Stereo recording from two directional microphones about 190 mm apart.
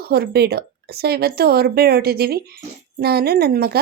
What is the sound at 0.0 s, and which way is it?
A woman's voice, 55° right (ahead or behind).